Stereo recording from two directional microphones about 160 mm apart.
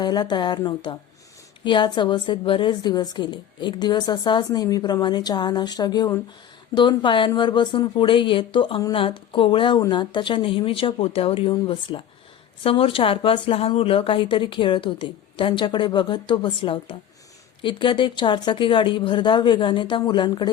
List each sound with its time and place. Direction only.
0.0 s a woman's voice: 25° left (ahead or behind)